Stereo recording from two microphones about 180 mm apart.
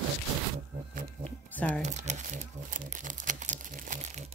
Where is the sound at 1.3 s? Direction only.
5° left (ahead or behind).